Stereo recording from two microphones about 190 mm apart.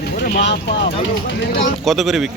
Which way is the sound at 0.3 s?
65° left (ahead or behind).